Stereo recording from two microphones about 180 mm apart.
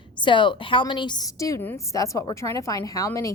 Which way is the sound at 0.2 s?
25° left (ahead or behind).